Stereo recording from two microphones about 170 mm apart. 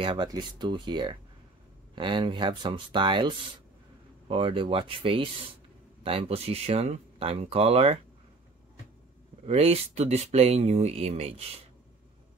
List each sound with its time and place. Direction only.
0.0 s speech: 30° right (ahead or behind)
9.5 s speech: 35° right (ahead or behind)